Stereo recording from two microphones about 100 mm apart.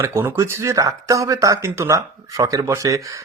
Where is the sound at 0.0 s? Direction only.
25° right (ahead or behind).